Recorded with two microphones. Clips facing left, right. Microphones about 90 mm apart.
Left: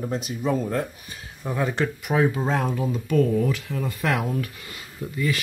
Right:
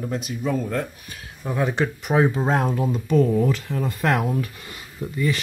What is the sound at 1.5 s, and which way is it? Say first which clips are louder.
Speech: right 2 dB; 10° right (ahead or behind).